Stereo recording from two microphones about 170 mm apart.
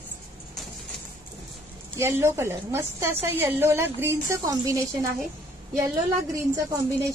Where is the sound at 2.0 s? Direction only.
15° right (ahead or behind).